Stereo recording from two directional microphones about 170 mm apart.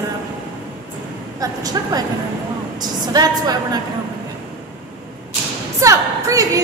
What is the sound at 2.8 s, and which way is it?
A woman's voice, 25° right (ahead or behind).